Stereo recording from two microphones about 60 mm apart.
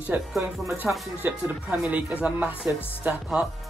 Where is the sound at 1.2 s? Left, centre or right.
Right.